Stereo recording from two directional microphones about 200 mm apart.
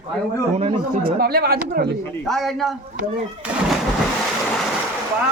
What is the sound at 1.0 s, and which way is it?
Speech, 50° right (ahead or behind).